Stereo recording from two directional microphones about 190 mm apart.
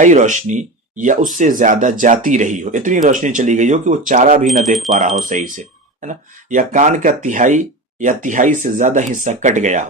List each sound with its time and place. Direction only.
0.0 s speech: 40° right (ahead or behind)